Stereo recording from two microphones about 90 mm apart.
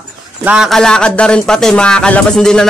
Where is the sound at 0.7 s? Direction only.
5° left (ahead or behind).